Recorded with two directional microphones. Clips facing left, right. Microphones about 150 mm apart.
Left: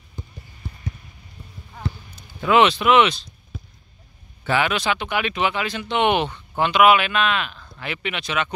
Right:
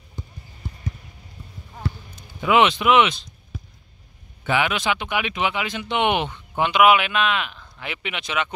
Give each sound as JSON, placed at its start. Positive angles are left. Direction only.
{"t": 2.4, "sound": "speech", "side_deg": -15}
{"t": 4.5, "sound": "speech", "side_deg": -15}